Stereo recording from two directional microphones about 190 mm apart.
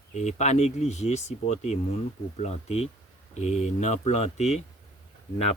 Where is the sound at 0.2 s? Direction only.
35° left (ahead or behind).